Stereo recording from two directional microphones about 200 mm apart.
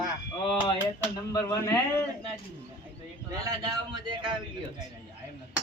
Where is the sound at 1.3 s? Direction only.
15° left (ahead or behind).